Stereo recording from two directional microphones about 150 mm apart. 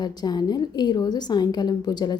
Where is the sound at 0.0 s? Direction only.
25° left (ahead or behind).